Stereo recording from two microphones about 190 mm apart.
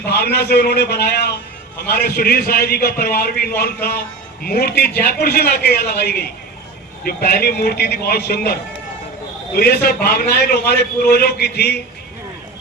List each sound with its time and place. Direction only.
0.1 s a man's voice: 60° left (ahead or behind)
9.6 s a man's voice: 55° left (ahead or behind)